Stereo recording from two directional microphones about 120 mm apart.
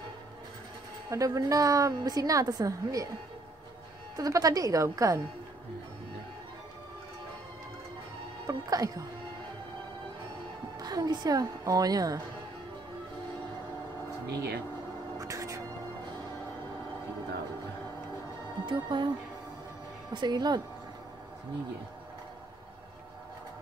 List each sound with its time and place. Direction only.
1.1 s a woman's voice: 30° right (ahead or behind)
4.2 s a woman's voice: 30° right (ahead or behind)
8.5 s a woman's voice: 30° right (ahead or behind)
10.8 s a woman's voice: 35° right (ahead or behind)
15.1 s music: 25° right (ahead or behind)
18.7 s a woman's voice: 40° right (ahead or behind)
20.1 s a woman's voice: 40° right (ahead or behind)